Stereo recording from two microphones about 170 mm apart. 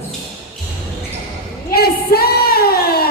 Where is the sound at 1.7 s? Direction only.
65° left (ahead or behind).